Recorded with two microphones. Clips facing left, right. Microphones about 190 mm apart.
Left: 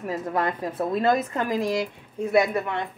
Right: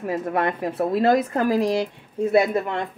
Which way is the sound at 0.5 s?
25° right (ahead or behind).